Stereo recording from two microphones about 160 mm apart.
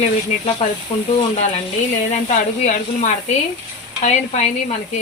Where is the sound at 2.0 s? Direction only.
50° left (ahead or behind).